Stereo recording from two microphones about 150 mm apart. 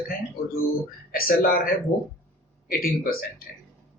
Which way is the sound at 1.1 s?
85° left.